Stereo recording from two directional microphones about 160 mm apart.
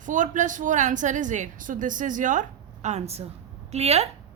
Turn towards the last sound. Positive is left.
turn(degrees=-40)  # may be behind; listen again after turning